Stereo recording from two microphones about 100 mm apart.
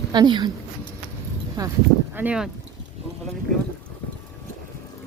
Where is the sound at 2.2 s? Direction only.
20° right (ahead or behind).